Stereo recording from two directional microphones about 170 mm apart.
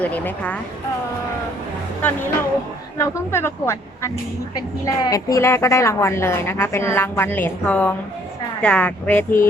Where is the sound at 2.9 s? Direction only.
15° left (ahead or behind).